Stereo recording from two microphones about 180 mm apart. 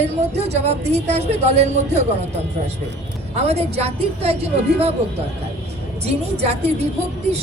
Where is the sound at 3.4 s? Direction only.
35° right (ahead or behind).